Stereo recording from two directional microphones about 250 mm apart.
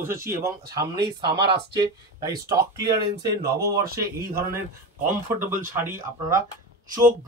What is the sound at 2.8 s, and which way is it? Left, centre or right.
Speech, right.